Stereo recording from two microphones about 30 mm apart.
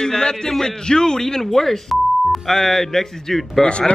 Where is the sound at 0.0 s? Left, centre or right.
Left.